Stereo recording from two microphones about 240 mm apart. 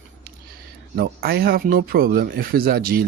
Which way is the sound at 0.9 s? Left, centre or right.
Right.